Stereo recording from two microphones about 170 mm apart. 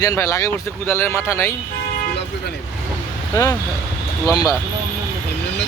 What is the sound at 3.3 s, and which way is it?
Speech, 20° left (ahead or behind).